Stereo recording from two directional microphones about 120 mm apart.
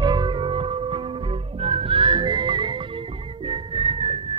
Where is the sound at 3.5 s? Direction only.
50° right (ahead or behind).